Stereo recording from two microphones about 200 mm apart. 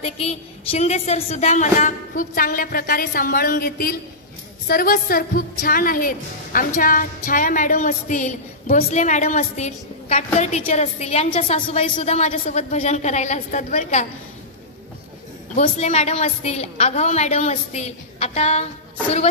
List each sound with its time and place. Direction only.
0.0 s a woman's voice: 30° left (ahead or behind)
15.5 s a woman's voice: 35° left (ahead or behind)